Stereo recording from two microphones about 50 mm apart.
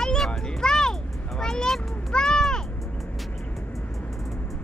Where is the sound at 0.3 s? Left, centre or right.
Centre.